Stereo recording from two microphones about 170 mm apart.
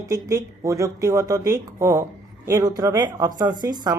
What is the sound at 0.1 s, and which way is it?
Speech, 20° right (ahead or behind).